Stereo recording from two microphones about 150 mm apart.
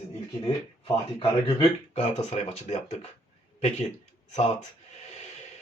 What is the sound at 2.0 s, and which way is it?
Speech, 50° left (ahead or behind).